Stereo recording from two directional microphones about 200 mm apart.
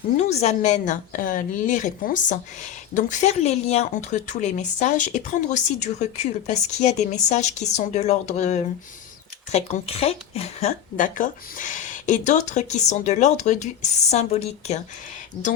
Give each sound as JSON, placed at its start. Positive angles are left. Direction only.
{"t": 0.2, "sound": "a woman's voice", "side_deg": 35}